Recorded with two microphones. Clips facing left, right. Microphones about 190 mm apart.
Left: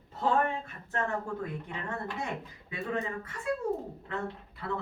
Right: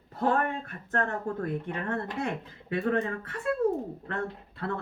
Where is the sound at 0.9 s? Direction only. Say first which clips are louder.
Right 3 dB; 60° right (ahead or behind).